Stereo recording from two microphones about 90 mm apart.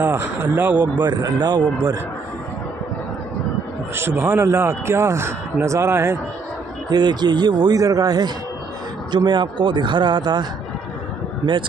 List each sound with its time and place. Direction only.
0.0 s a man's voice: 20° right (ahead or behind)
1.0 s speech: 50° right (ahead or behind)
4.4 s a man's voice: 30° right (ahead or behind)
6.9 s speech: 55° right (ahead or behind)
9.1 s speech: 55° right (ahead or behind)